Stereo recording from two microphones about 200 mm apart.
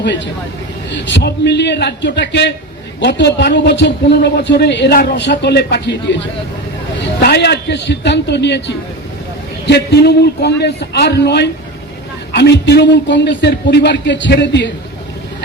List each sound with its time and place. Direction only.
0.9 s a man's voice: 60° left (ahead or behind)